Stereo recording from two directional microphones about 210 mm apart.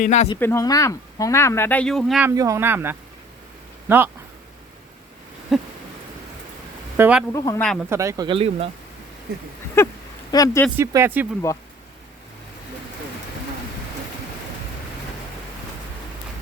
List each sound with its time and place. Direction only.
0.0 s speech: 35° left (ahead or behind)
0.3 s speech: 10° left (ahead or behind)
2.3 s speech: 15° right (ahead or behind)
5.5 s a sound: centre (ahead or behind)
6.9 s speech: 10° right (ahead or behind)
7.3 s speech: 15° left (ahead or behind)
7.9 s speech: 15° right (ahead or behind)
9.8 s a sound: 10° left (ahead or behind)
10.3 s speech: 15° left (ahead or behind)
10.8 s speech: 10° right (ahead or behind)